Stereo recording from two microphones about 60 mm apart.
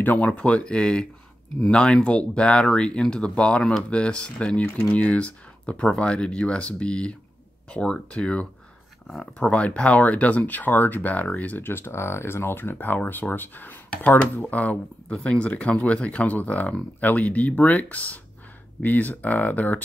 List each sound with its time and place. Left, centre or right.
0.0 s speech: left